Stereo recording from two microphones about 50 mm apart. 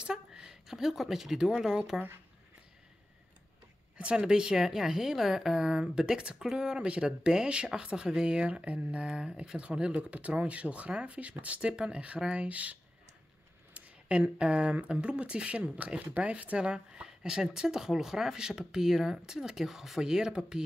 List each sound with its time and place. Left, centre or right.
0.0 s speech: centre
4.0 s speech: centre
13.7 s speech: right